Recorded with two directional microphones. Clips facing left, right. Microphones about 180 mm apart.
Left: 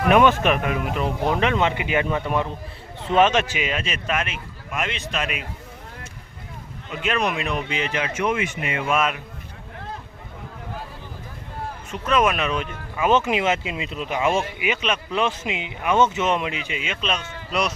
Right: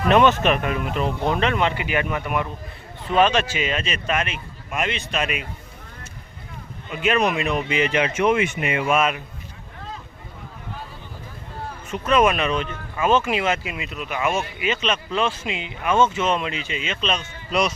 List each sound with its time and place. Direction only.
0.1 s speech: 10° left (ahead or behind)
1.2 s a man's voice: 15° left (ahead or behind); by 5.5 s centre (ahead or behind)
6.9 s a man's voice: 5° right (ahead or behind)
8.2 s speech: 75° right (ahead or behind)
8.7 s a man's voice: 5° right (ahead or behind)
11.9 s speech: centre (ahead or behind); by 14.4 s 30° left (ahead or behind)
14.6 s speech: 10° left (ahead or behind)